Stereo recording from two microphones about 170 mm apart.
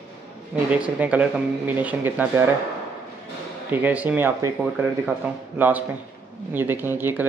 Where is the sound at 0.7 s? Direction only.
10° right (ahead or behind).